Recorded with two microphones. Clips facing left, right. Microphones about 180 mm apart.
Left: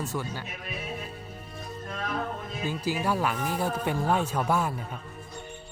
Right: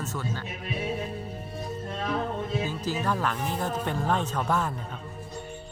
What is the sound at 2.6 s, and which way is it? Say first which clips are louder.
Speech: left 1 dB; 10° left (ahead or behind).